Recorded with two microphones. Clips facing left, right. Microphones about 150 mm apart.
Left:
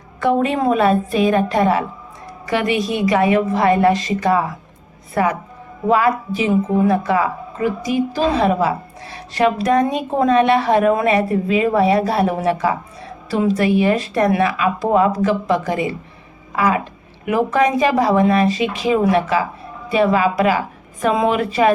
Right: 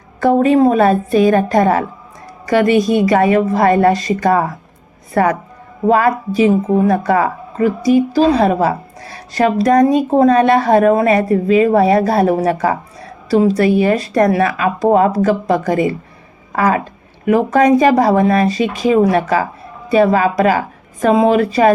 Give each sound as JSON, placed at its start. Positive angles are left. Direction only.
{"t": 0.2, "sound": "a woman's voice", "side_deg": -40}